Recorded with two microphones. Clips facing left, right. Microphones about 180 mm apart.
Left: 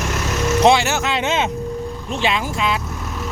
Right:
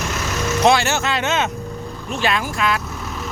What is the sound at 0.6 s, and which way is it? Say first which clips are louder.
Speech: left 1 dB; 20° left (ahead or behind).